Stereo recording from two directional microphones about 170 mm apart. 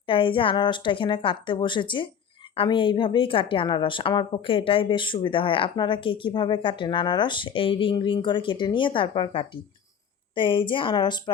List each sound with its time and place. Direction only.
0.1 s a woman's voice: 30° left (ahead or behind)